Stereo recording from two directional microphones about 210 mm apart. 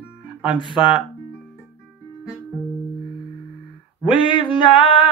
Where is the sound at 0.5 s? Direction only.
20° left (ahead or behind).